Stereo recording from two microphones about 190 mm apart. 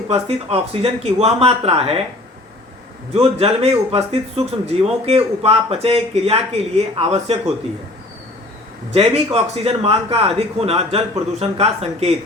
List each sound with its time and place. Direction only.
0.1 s a man's voice: 30° right (ahead or behind)
3.1 s a man's voice: 30° right (ahead or behind)
8.9 s a man's voice: 35° right (ahead or behind)